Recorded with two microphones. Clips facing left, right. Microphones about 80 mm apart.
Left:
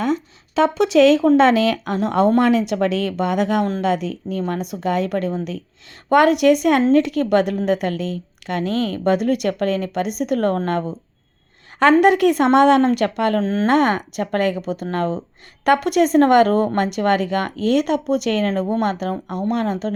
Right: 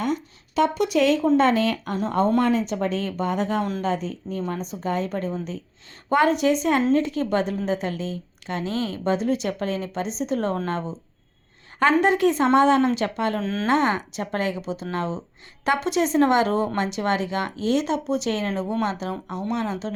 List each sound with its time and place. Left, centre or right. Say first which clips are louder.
0.9 s a woman's voice: left 6 dB; left
11.8 s a woman's voice: left 5 dB; left
13.4 s speech: left 6 dB; left
13.7 s a woman's voice: left 3 dB; left